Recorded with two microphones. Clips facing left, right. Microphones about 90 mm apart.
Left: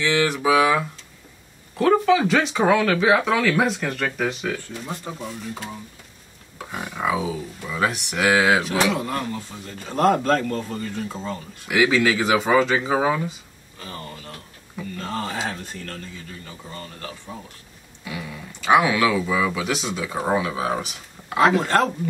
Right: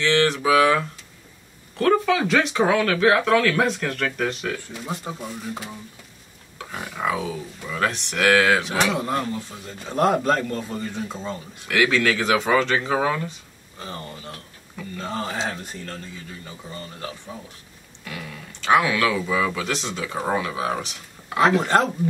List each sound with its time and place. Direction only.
0.0 s speech: 10° left (ahead or behind)
6.6 s speech: 15° left (ahead or behind)
8.9 s speech: 20° right (ahead or behind)
10.8 s speech: 20° right (ahead or behind)
11.6 s speech: 5° left (ahead or behind)
13.7 s speech: 25° right (ahead or behind)
18.0 s speech: 5° left (ahead or behind)
21.5 s speech: 20° right (ahead or behind)